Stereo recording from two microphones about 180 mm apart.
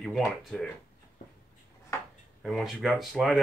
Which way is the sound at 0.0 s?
Centre (ahead or behind).